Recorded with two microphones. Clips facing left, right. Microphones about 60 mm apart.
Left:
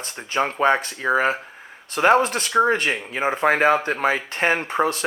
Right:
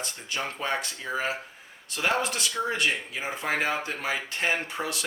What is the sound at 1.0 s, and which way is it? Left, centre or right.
Speech, left.